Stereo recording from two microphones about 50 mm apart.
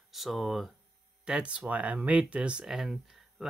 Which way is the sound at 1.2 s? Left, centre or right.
Right.